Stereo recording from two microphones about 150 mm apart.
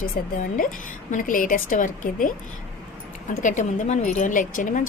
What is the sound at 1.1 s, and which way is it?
A woman's voice, 60° left (ahead or behind).